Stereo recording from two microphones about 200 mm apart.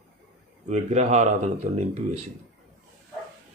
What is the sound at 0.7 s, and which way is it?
Speech, 35° right (ahead or behind).